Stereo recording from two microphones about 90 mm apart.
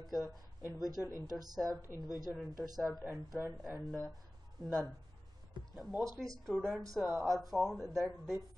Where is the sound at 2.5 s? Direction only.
45° right (ahead or behind).